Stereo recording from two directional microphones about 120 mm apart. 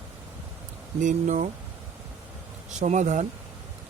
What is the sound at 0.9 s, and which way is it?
Speech, 90° right.